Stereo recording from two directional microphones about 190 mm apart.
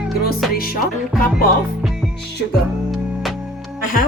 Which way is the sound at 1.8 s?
Centre (ahead or behind).